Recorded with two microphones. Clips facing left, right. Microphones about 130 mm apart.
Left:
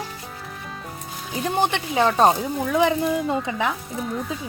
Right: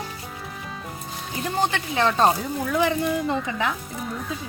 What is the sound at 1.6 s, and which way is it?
Speech, 15° left (ahead or behind).